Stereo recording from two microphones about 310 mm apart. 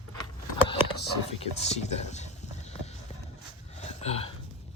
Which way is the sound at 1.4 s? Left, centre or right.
Left.